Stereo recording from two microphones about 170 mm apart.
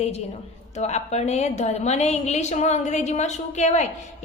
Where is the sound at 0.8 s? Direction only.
40° left (ahead or behind).